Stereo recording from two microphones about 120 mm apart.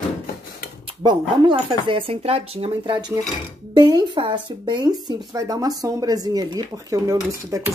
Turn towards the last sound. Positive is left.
turn(degrees=-25)  # may be behind; listen again after turning